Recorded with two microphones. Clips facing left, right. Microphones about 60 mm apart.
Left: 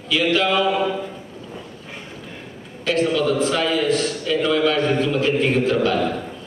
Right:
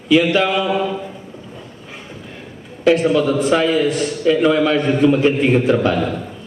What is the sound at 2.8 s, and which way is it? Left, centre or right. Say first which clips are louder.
A man's voice: right 5 dB; right.